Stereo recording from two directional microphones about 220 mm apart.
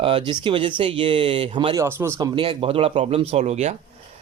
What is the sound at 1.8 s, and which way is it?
Speech, 10° right (ahead or behind).